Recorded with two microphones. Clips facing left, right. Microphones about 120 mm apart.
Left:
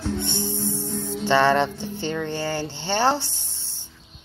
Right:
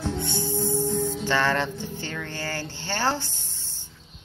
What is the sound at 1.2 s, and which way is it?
Speech, 20° left (ahead or behind).